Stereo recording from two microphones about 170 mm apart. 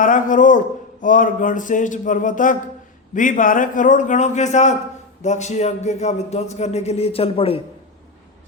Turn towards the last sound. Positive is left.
turn(degrees=35)  # may be behind; listen again after turning